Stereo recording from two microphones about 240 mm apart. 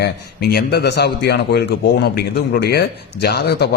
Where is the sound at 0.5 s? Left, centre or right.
Left.